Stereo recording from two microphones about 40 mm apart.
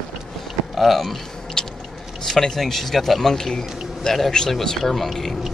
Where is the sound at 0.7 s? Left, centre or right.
Centre.